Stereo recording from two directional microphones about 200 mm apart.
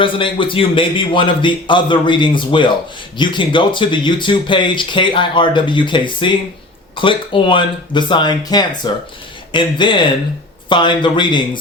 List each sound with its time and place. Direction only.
0.0 s speech: 25° left (ahead or behind)